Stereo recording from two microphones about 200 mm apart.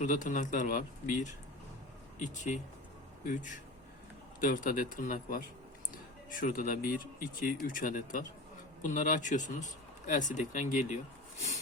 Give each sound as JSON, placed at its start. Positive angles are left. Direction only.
{"t": 0.0, "sound": "speech", "side_deg": 40}